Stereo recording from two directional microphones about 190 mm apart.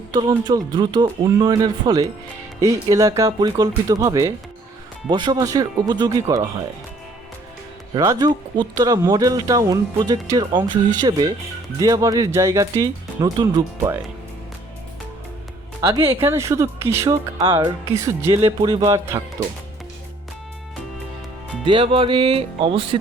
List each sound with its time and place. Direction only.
0.1 s speech: 20° right (ahead or behind)
7.9 s speech: 20° right (ahead or behind)
15.8 s speech: 20° right (ahead or behind)
21.6 s speech: 25° right (ahead or behind)